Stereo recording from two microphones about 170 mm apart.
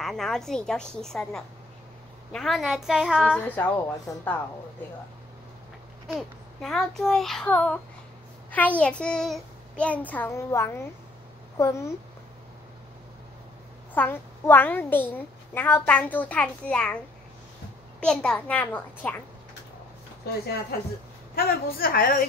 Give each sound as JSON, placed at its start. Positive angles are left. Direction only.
{"t": 0.0, "sound": "a child's voice", "side_deg": 0}
{"t": 3.4, "sound": "a child's voice", "side_deg": 10}
{"t": 6.1, "sound": "a child's voice", "side_deg": 0}
{"t": 13.9, "sound": "a child's voice", "side_deg": 10}
{"t": 18.0, "sound": "a child's voice", "side_deg": 5}
{"t": 21.4, "sound": "a woman's voice", "side_deg": 60}